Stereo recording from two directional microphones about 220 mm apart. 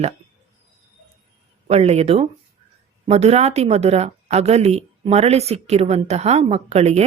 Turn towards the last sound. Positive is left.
turn(degrees=-30)  # may be behind; listen again after turning